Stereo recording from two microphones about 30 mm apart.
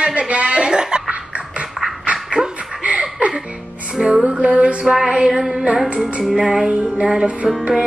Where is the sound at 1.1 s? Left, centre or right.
Right.